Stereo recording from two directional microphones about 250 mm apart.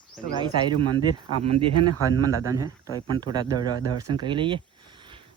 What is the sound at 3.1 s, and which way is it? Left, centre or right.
Speech, centre.